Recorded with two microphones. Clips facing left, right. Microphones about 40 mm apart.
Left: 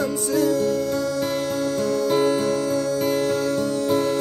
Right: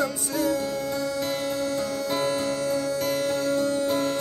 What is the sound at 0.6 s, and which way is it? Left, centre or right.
Music, centre.